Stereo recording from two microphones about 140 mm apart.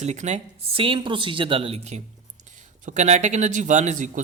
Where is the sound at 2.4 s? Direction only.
60° right (ahead or behind).